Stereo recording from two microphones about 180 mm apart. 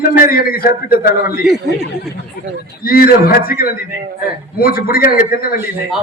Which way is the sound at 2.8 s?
55° left (ahead or behind).